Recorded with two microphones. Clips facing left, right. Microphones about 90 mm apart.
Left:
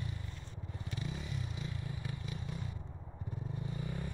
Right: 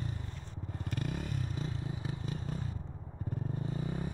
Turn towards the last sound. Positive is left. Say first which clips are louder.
# right 4 dB
turn(degrees=-30)  # may be behind; listen again after turning